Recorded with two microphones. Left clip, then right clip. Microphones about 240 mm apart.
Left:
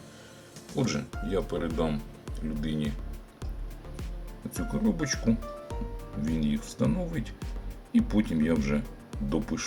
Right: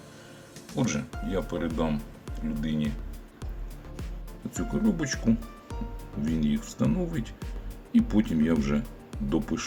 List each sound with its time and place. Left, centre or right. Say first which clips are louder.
0.7 s speech: right 1 dB; centre
4.5 s speech: right 2 dB; centre